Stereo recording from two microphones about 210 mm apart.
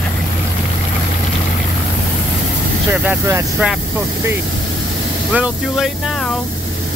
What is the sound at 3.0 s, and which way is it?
Speech, 5° right (ahead or behind).